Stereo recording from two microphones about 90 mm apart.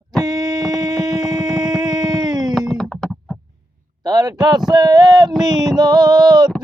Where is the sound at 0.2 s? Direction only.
40° right (ahead or behind).